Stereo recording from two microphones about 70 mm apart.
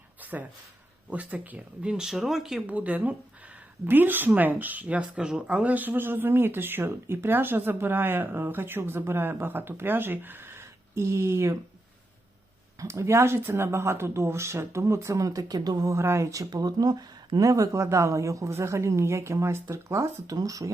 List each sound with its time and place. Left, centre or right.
0.2 s a sound: right
1.1 s speech: right; by 2.6 s centre
2.6 s speech: right
12.8 s speech: right
16.0 s speech: right
16.5 s speech: right